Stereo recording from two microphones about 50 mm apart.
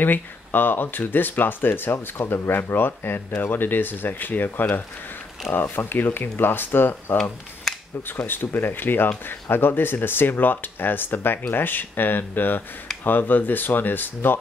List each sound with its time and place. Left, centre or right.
0.0 s speech: left
7.7 s camera: centre
8.2 s speech: left